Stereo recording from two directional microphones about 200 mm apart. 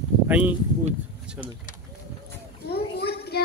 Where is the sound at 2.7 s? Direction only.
50° left (ahead or behind).